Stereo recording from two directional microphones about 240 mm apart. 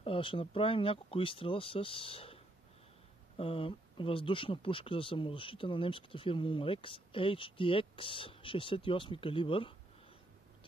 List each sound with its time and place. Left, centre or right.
0.0 s speech: left